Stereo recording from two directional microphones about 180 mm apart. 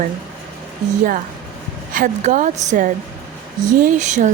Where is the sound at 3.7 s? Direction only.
45° right (ahead or behind).